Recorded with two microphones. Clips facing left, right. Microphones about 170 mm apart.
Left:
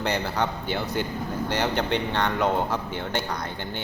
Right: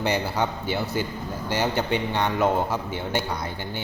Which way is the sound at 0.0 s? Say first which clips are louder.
Right 1 dB; 10° right (ahead or behind).